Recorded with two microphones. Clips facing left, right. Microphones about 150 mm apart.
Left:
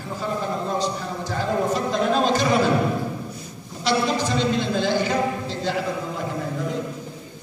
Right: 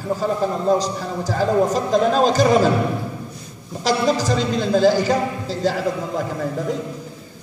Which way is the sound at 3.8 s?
40° right (ahead or behind).